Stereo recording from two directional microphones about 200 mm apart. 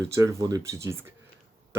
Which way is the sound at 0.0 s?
15° right (ahead or behind).